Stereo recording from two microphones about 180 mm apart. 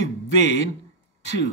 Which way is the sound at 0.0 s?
35° right (ahead or behind).